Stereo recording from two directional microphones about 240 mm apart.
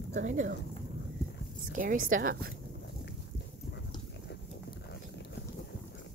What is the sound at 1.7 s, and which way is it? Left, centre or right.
Speech, right.